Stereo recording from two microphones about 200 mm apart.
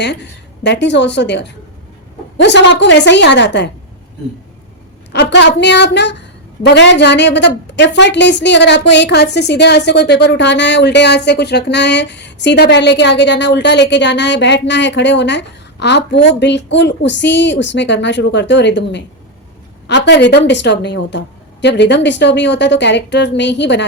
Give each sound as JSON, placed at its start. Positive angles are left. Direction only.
{"t": 0.6, "sound": "a woman's voice", "side_deg": 60}
{"t": 5.1, "sound": "a woman's voice", "side_deg": 60}